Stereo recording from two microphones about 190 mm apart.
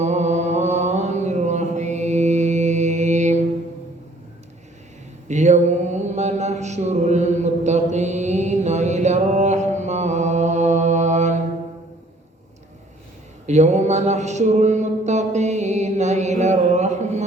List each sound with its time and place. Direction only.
0.0 s mantra: 35° right (ahead or behind)
5.3 s mantra: 40° right (ahead or behind)
13.5 s a sound: 35° right (ahead or behind)